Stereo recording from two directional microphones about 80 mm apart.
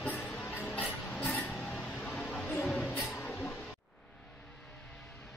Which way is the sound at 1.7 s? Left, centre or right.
Centre.